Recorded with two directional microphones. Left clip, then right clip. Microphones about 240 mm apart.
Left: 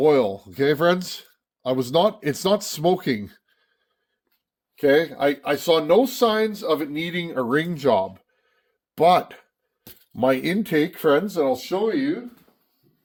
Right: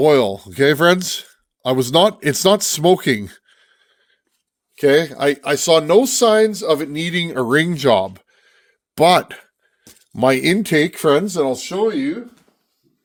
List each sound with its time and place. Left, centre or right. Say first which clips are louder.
0.0 s speech: right 4 dB; right
4.7 s speech: right 4 dB; right